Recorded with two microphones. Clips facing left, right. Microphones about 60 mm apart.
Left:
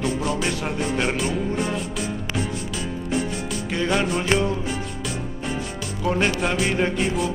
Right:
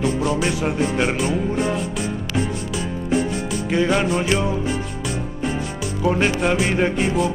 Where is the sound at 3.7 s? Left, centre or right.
Centre.